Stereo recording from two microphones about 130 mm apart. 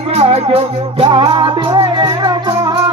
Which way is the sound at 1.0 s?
35° right (ahead or behind).